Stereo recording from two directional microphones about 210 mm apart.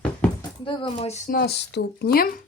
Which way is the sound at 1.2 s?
45° left (ahead or behind).